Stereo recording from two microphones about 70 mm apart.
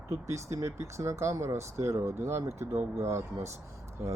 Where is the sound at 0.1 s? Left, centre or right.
Right.